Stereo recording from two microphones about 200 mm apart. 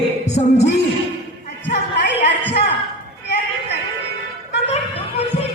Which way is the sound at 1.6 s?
60° left (ahead or behind).